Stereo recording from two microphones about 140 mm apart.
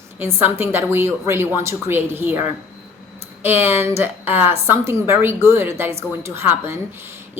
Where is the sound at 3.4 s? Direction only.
15° right (ahead or behind).